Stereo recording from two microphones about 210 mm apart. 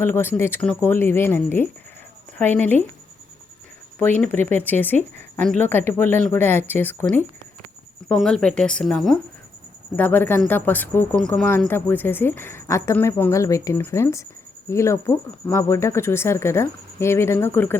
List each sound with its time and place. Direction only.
0.0 s speech: 10° left (ahead or behind)
4.2 s speech: 10° left (ahead or behind)